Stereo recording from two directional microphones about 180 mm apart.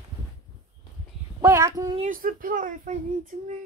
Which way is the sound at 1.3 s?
20° right (ahead or behind).